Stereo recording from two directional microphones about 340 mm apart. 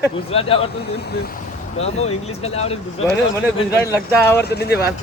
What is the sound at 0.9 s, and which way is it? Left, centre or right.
Speech, left.